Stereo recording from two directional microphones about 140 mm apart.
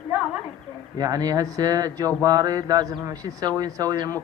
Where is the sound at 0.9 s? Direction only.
25° right (ahead or behind).